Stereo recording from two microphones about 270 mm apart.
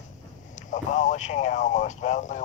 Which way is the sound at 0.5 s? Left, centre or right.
Left.